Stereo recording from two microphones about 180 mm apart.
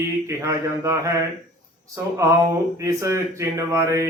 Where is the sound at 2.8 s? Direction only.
15° right (ahead or behind).